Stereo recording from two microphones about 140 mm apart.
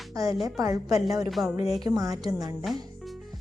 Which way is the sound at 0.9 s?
25° right (ahead or behind).